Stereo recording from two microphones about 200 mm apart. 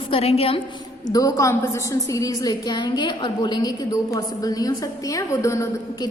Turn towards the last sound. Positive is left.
turn(degrees=15)  # may be behind; listen again after turning